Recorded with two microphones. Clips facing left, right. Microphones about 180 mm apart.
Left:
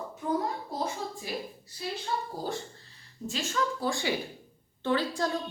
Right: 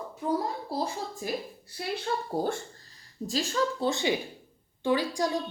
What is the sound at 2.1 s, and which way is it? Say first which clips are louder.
Speech: right 1 dB; 65° right (ahead or behind).